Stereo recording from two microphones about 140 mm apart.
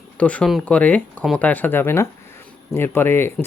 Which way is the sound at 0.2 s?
10° left (ahead or behind).